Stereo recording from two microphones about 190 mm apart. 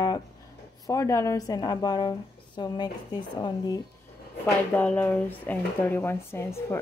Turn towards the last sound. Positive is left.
turn(degrees=15)  # may be behind; listen again after turning